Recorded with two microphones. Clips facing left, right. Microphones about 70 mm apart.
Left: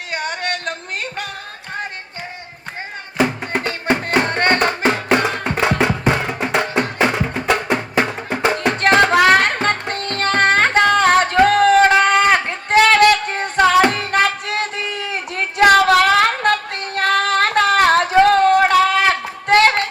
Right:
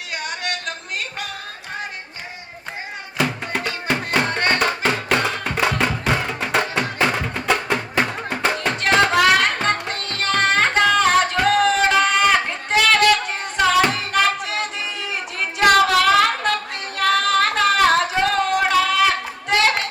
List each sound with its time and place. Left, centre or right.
0.1 s a sound: left
3.6 s music: left
3.9 s music: left
4.3 s music: left
4.6 s music: left
8.8 s music: left
15.5 s female singing: left